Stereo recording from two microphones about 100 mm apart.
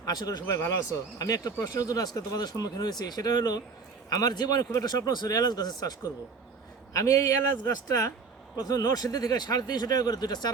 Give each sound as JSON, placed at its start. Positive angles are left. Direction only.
{"t": 0.0, "sound": "speech", "side_deg": 40}
{"t": 0.4, "sound": "speech", "side_deg": 30}